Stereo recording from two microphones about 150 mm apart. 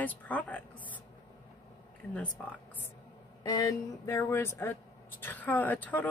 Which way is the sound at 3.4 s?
25° left (ahead or behind).